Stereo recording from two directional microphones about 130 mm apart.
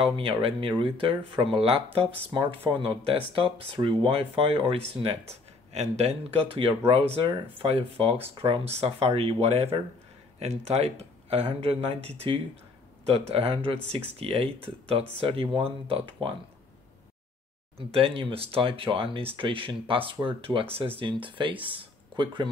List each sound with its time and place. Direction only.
0.0 s speech: 40° right (ahead or behind)
17.7 s speech: 45° right (ahead or behind)